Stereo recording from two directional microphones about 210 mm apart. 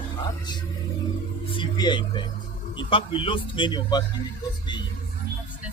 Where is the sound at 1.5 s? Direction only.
20° left (ahead or behind).